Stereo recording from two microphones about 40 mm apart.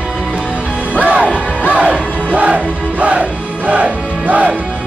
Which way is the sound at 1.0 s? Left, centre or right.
Right.